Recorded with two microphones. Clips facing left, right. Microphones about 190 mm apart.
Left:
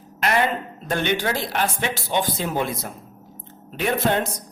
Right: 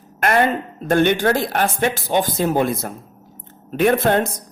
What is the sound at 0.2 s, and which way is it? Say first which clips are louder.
A woman's voice: right 4 dB; 50° right (ahead or behind).